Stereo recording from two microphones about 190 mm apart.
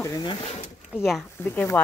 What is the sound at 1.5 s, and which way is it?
Speech, 10° left (ahead or behind).